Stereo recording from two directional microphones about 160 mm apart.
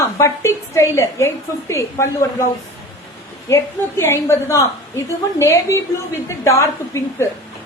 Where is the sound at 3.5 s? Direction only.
15° left (ahead or behind).